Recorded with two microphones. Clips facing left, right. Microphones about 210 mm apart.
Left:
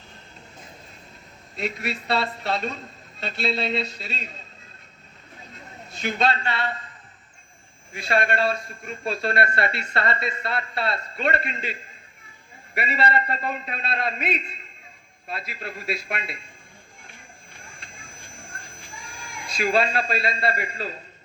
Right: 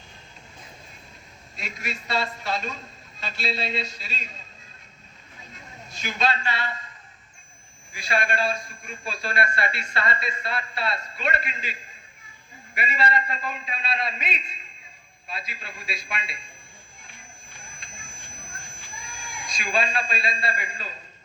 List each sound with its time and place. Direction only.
1.5 s speech: 60° left (ahead or behind)
5.9 s speech: 60° left (ahead or behind)
7.9 s speech: 60° left (ahead or behind)
17.6 s a sound: 60° left (ahead or behind)